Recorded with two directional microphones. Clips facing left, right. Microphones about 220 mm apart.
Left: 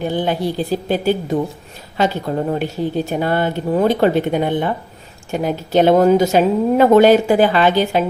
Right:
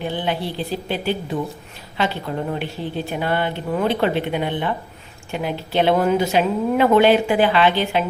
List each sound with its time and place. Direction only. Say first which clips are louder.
0.0 s a woman's voice: left 5 dB; 45° left (ahead or behind)